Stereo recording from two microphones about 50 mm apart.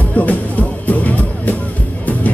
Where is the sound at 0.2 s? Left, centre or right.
Left.